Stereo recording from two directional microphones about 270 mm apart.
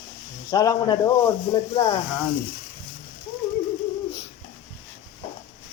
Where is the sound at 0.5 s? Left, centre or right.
Centre.